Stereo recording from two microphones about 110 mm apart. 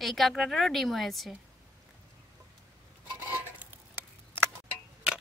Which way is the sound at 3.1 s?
20° right (ahead or behind).